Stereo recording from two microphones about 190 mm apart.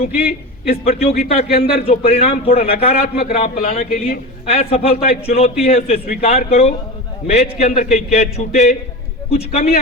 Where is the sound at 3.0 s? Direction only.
50° left (ahead or behind).